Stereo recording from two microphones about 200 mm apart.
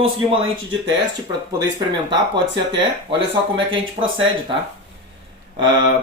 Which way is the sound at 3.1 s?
25° right (ahead or behind).